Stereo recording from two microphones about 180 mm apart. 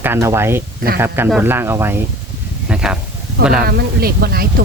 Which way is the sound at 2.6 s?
5° right (ahead or behind).